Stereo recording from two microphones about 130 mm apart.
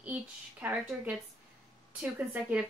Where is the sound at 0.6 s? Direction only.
10° right (ahead or behind).